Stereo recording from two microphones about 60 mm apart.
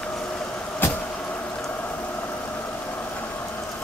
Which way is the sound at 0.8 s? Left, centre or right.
Left.